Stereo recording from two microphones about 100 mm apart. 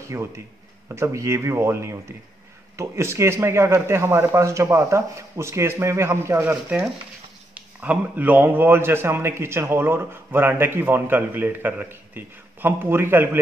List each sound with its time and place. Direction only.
0.0 s a man's voice: 30° right (ahead or behind)